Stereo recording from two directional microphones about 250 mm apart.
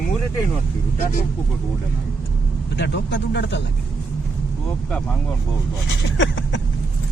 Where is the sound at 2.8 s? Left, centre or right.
Left.